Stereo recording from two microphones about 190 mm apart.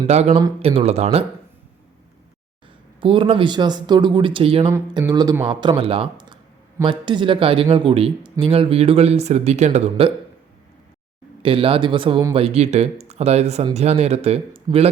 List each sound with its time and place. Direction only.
0.1 s speech: 35° right (ahead or behind)
3.0 s speech: 25° right (ahead or behind)
11.4 s speech: 30° right (ahead or behind)